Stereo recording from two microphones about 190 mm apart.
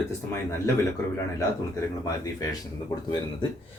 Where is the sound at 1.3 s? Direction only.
15° left (ahead or behind).